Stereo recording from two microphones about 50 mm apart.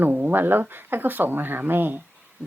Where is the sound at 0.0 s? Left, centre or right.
Right.